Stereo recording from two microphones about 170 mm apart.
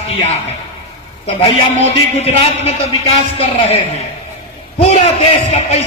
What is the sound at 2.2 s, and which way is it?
A man's voice, 35° left (ahead or behind).